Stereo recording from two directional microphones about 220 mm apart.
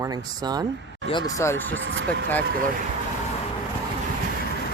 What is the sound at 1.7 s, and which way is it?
Speech, 60° right (ahead or behind).